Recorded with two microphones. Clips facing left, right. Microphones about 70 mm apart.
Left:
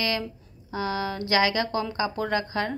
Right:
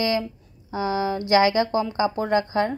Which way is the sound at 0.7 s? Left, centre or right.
Right.